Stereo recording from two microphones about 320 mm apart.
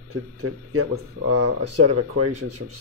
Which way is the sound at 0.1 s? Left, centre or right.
Right.